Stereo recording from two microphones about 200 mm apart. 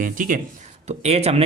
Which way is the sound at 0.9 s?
30° right (ahead or behind).